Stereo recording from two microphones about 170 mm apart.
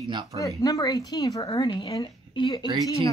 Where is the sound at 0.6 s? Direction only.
20° left (ahead or behind).